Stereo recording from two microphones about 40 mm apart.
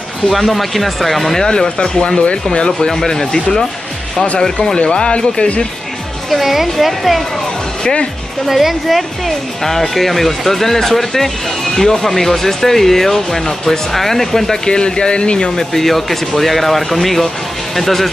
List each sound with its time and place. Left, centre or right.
0.3 s speech: centre
1.4 s speech: centre
2.9 s speech: centre
4.7 s speech: left
6.3 s speech: centre
7.8 s speech: left
8.5 s speech: centre
14.7 s speech: left
15.5 s speech: centre